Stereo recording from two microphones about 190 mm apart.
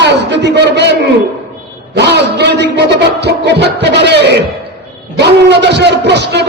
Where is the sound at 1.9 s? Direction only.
60° right (ahead or behind).